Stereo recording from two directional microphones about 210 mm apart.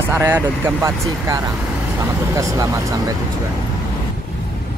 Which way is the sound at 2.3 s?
15° right (ahead or behind).